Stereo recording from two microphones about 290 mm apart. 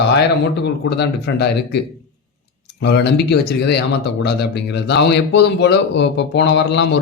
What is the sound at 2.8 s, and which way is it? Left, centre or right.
A man's voice, left.